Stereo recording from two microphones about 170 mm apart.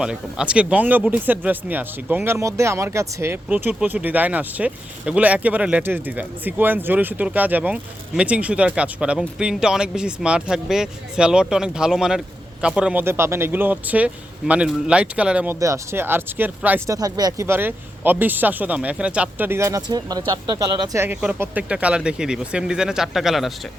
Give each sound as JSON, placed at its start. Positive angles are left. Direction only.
{"t": 0.0, "sound": "speech", "side_deg": -5}